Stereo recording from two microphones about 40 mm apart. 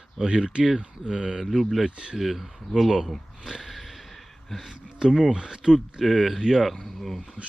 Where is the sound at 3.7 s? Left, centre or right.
Centre.